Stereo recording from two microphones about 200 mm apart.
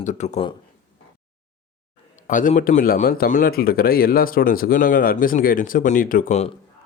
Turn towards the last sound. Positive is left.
turn(degrees=35)  # may be behind; listen again after turning